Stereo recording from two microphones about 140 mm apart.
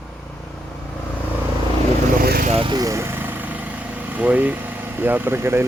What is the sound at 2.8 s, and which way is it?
Speech, 20° right (ahead or behind).